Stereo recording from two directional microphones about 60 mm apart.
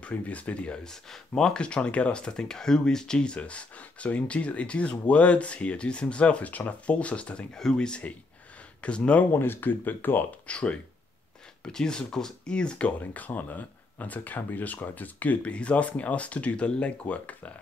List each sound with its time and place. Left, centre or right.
0.0 s speech: left
9.3 s speech: left
10.4 s speech: centre